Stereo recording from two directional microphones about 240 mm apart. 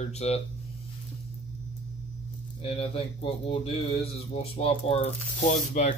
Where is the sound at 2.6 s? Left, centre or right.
Left.